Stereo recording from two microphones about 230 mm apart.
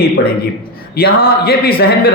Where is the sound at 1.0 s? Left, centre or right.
Left.